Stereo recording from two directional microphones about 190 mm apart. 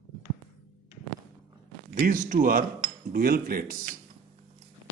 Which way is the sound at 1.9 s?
45° right (ahead or behind).